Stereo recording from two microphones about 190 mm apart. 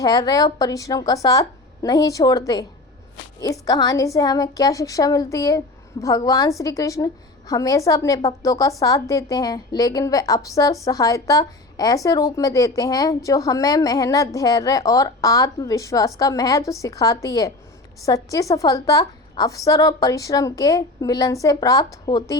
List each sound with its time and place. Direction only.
0.0 s a woman's voice: 20° left (ahead or behind)
3.4 s a woman's voice: 20° left (ahead or behind)